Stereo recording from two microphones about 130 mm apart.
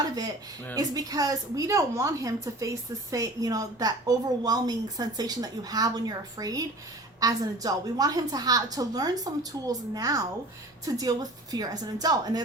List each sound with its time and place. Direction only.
0.8 s a woman's voice: 30° right (ahead or behind)